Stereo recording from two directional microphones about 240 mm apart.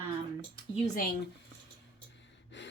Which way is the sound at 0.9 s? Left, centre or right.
Left.